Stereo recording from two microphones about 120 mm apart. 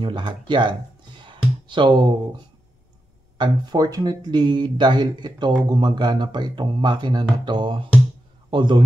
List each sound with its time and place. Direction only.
0.0 s speech: 40° right (ahead or behind)
1.2 s music: 40° right (ahead or behind)
3.3 s a man's voice: 35° right (ahead or behind)